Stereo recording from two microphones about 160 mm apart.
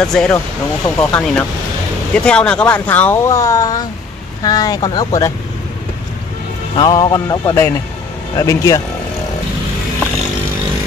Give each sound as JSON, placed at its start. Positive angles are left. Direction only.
{"t": 0.0, "sound": "speech", "side_deg": 5}
{"t": 6.8, "sound": "speech", "side_deg": 25}